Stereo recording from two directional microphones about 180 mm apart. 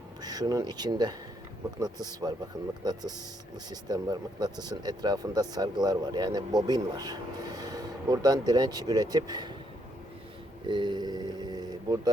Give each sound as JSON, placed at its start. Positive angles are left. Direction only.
{"t": 0.2, "sound": "speech", "side_deg": -20}
{"t": 10.7, "sound": "speech", "side_deg": -25}